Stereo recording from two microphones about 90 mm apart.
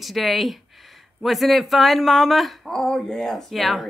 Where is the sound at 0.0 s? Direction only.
Centre (ahead or behind).